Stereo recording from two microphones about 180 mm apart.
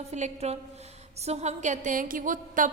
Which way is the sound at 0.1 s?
40° right (ahead or behind).